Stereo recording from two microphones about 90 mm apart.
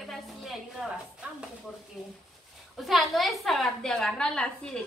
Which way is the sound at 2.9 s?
Centre (ahead or behind).